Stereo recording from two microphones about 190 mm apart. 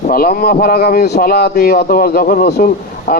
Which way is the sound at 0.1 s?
50° left (ahead or behind).